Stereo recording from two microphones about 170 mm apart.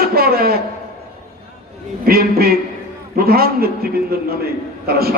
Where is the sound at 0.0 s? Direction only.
65° right (ahead or behind).